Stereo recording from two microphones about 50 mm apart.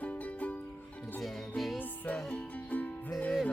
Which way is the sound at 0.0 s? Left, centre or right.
Left.